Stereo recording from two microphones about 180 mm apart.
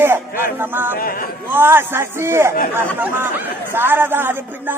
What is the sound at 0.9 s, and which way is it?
Speech, 50° left (ahead or behind).